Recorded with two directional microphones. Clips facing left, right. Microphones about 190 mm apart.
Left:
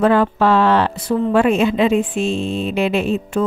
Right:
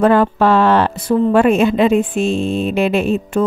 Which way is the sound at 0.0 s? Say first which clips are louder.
Right 2 dB; 50° right (ahead or behind).